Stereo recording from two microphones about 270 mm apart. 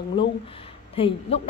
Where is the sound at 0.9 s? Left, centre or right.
Left.